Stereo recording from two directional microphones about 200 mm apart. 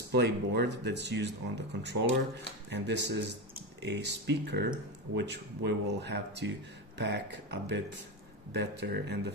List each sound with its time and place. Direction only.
0.1 s speech: 55° right (ahead or behind)
8.5 s speech: 55° right (ahead or behind)